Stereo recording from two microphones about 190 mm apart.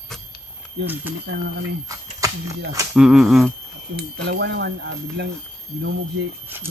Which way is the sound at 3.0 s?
5° right (ahead or behind).